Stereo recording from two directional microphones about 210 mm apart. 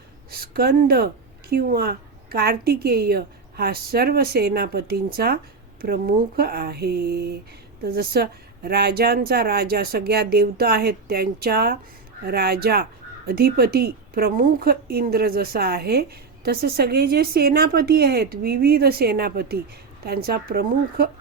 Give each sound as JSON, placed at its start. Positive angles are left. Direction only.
{"t": 0.3, "sound": "speech", "side_deg": -45}